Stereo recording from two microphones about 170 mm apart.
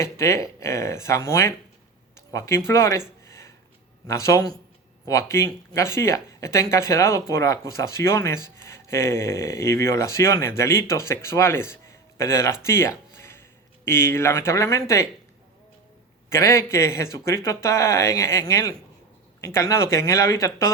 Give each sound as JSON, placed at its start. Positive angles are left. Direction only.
{"t": 0.0, "sound": "speech", "side_deg": 15}
{"t": 12.6, "sound": "a sound", "side_deg": 15}
{"t": 13.8, "sound": "speech", "side_deg": 15}
{"t": 16.3, "sound": "speech", "side_deg": 15}